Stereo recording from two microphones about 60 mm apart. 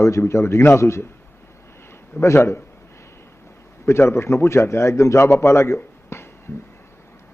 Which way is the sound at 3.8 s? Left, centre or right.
Left.